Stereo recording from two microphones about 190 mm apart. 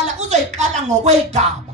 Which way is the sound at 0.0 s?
35° right (ahead or behind).